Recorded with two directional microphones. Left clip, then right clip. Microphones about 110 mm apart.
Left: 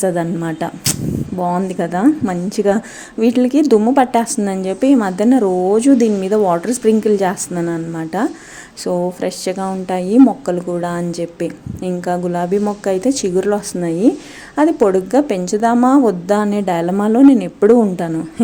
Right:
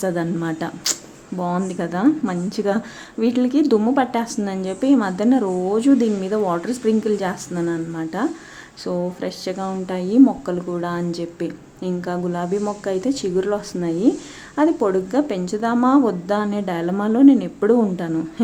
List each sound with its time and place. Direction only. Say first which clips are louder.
0.0 s a woman's voice: left 5 dB; 30° left (ahead or behind)